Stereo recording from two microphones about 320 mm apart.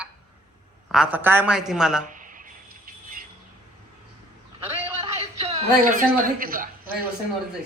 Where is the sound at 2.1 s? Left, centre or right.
Right.